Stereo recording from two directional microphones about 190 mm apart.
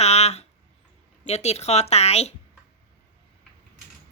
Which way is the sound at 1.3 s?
35° left (ahead or behind).